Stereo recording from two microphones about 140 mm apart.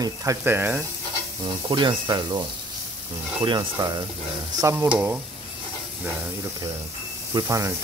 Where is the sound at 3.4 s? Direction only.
35° right (ahead or behind).